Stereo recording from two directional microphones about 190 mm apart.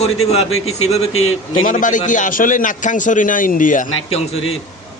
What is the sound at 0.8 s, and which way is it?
A man's voice, 35° left (ahead or behind).